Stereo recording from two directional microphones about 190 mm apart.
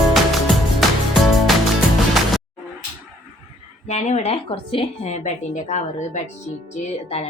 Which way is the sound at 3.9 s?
35° left (ahead or behind).